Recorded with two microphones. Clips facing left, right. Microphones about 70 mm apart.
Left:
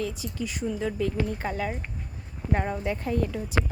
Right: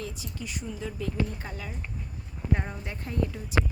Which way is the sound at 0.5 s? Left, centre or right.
Left.